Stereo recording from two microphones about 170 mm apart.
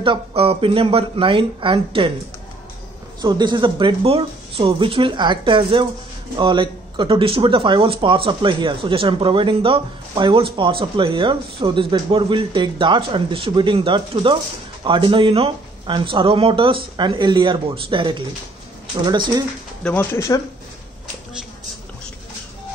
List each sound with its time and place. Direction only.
0.0 s speech: 30° right (ahead or behind)
3.2 s speech: 25° right (ahead or behind)
19.8 s speech: 10° left (ahead or behind)